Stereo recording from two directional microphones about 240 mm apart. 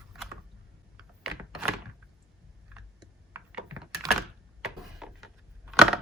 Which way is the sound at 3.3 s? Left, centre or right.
Centre.